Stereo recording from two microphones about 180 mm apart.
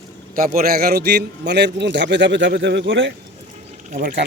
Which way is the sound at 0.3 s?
50° right (ahead or behind).